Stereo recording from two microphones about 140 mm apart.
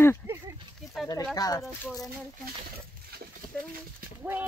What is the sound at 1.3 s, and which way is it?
Speech, 25° left (ahead or behind).